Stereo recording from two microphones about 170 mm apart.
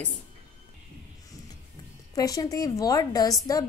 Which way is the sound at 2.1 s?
20° left (ahead or behind).